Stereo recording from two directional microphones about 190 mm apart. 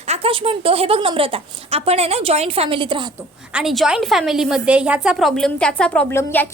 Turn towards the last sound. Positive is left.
turn(degrees=10)  # may be behind; listen again after turning